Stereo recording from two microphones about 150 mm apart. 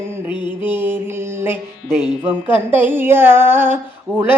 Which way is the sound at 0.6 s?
15° right (ahead or behind).